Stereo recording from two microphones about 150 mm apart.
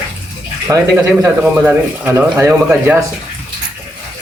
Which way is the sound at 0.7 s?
20° right (ahead or behind).